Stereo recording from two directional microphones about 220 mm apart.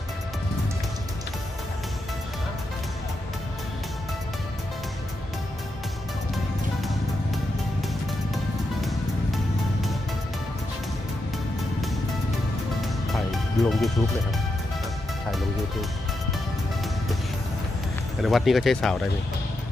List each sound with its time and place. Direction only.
13.1 s music: centre (ahead or behind)
18.2 s speech: centre (ahead or behind)